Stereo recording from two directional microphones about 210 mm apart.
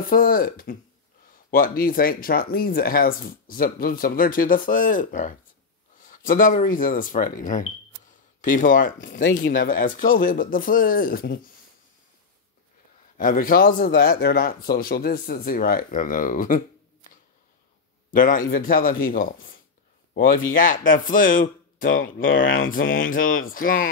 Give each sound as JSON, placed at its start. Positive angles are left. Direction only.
{"t": 0.0, "sound": "speech", "side_deg": 40}
{"t": 13.2, "sound": "speech", "side_deg": 40}